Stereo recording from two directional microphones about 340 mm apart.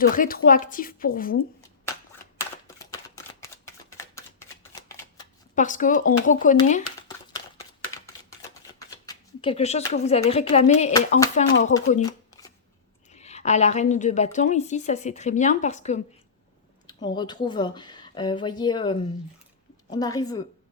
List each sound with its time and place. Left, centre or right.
0.2 s a woman's voice: left
2.4 s typewriter: centre
3.4 s a sound: centre
4.7 s shuffling cards: centre
5.6 s a woman's voice: left
8.9 s a woman's voice: centre